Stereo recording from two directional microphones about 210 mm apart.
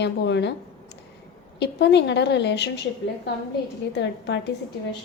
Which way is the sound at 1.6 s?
55° left (ahead or behind).